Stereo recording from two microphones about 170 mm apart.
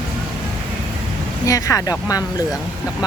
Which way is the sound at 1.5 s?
20° left (ahead or behind).